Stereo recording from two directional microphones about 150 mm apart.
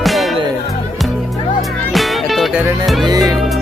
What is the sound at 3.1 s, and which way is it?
Music, 25° right (ahead or behind).